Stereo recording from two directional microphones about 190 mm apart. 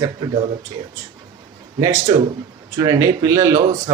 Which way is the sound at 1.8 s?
15° right (ahead or behind).